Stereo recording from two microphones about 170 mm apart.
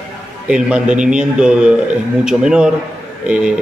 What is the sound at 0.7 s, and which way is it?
Speech, 5° right (ahead or behind).